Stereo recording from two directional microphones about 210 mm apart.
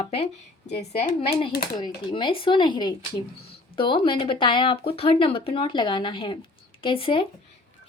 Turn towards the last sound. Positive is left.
turn(degrees=25)  # may be behind; listen again after turning